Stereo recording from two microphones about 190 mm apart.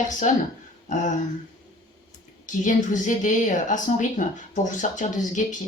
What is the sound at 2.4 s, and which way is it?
Speech, 40° left (ahead or behind).